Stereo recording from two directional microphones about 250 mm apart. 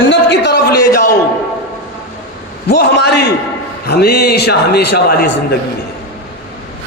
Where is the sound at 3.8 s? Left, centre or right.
Left.